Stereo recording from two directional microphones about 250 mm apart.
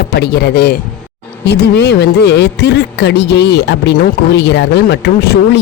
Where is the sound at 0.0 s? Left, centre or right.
Left.